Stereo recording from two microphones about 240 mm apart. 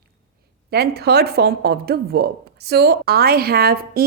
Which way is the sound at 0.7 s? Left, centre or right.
Right.